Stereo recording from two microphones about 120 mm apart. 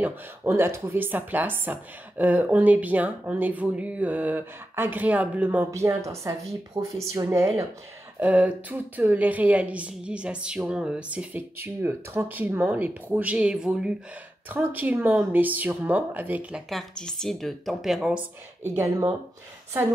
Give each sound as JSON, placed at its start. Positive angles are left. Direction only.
{"t": 0.0, "sound": "speech", "side_deg": -20}
{"t": 5.7, "sound": "a woman's voice", "side_deg": -25}
{"t": 6.8, "sound": "speech", "side_deg": -50}
{"t": 7.2, "sound": "a woman's voice", "side_deg": -25}
{"t": 8.2, "sound": "speech", "side_deg": -10}
{"t": 16.6, "sound": "speech", "side_deg": 5}